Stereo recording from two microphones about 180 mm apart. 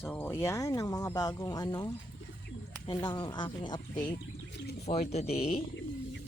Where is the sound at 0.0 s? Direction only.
10° left (ahead or behind).